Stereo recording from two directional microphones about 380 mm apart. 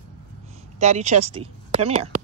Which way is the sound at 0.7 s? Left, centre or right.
Centre.